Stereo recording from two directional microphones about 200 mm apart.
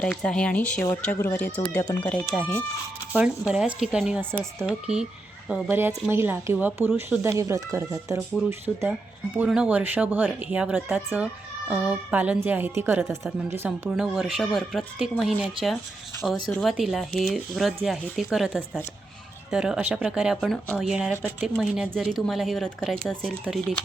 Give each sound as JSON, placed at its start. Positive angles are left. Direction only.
{"t": 0.0, "sound": "speech", "side_deg": 5}
{"t": 3.2, "sound": "speech", "side_deg": -5}